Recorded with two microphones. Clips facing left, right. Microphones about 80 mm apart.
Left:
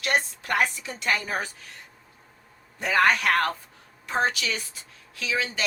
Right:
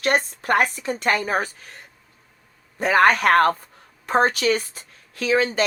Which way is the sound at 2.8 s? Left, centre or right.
Right.